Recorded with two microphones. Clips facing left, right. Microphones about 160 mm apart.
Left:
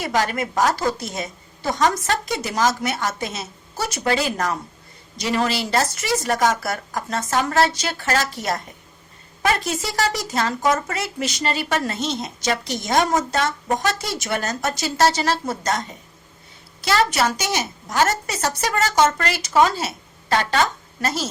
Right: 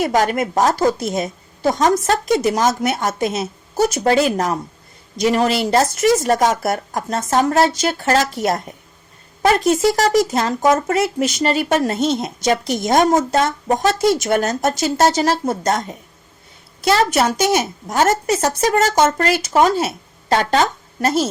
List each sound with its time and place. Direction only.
0.0 s a woman's voice: 50° right (ahead or behind)
6.3 s a woman's voice: 25° right (ahead or behind)
6.6 s a woman's voice: 50° right (ahead or behind)
7.9 s a woman's voice: 30° right (ahead or behind)
8.2 s a woman's voice: 50° right (ahead or behind)
9.6 s a woman's voice: 50° right (ahead or behind)